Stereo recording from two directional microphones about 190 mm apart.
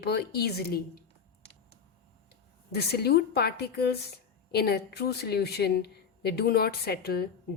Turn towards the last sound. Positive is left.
turn(degrees=55)  # may be behind; listen again after turning